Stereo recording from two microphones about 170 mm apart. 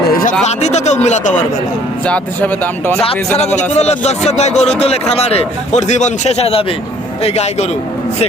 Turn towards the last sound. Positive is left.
turn(degrees=40)  # may be behind; listen again after turning